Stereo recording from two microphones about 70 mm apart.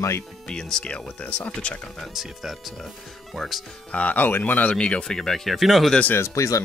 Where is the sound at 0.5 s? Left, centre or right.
Centre.